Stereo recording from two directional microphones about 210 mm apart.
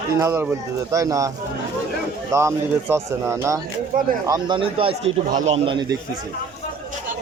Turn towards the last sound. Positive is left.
turn(degrees=-25)  # may be behind; listen again after turning